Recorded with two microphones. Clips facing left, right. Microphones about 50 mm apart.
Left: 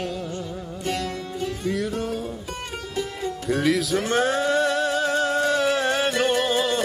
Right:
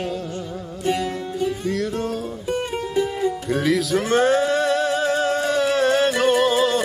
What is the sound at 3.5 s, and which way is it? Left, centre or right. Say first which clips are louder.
Music: even; centre.